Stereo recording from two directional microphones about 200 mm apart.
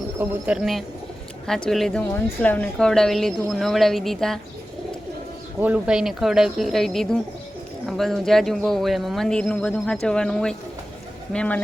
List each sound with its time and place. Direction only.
0.2 s a woman's voice: 5° right (ahead or behind)
5.5 s a woman's voice: 10° right (ahead or behind)